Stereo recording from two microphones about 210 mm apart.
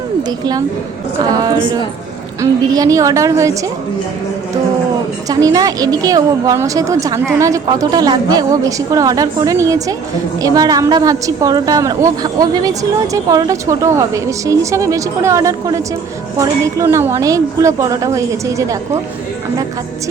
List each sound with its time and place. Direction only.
0.2 s a woman's voice: 20° right (ahead or behind)
5.3 s a woman's voice: 15° right (ahead or behind)